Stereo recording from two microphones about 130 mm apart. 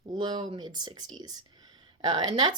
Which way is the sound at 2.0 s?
35° right (ahead or behind).